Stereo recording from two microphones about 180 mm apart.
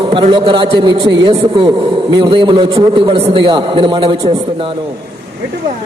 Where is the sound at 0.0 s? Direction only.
30° right (ahead or behind).